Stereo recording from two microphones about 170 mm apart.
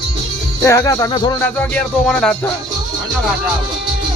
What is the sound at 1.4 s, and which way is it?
Speech, 10° left (ahead or behind).